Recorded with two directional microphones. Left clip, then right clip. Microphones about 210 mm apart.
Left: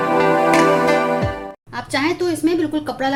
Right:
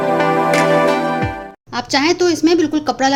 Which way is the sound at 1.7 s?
40° right (ahead or behind).